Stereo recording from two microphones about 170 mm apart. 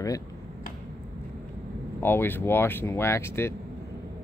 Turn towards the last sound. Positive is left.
turn(degrees=15)  # may be behind; listen again after turning